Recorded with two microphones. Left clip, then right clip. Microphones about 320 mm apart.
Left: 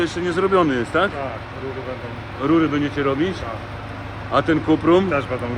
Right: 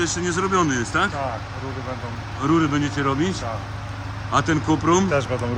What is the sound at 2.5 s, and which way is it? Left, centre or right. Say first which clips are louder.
Speech: left 2 dB; centre.